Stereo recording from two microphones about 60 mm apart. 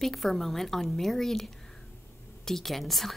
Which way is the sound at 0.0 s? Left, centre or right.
Centre.